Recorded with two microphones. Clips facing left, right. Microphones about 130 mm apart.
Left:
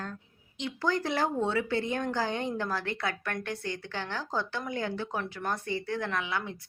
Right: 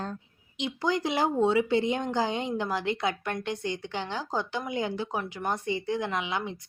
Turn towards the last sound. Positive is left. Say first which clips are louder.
# right 2 dB
turn(degrees=-20)  # may be behind; listen again after turning